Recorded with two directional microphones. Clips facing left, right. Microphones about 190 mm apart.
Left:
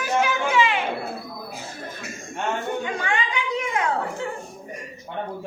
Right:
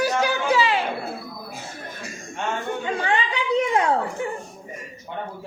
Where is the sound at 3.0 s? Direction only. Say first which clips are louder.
Right 3 dB; 35° right (ahead or behind).